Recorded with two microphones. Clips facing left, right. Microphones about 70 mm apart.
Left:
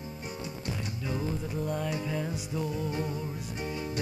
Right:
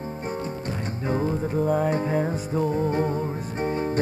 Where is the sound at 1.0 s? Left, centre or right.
Right.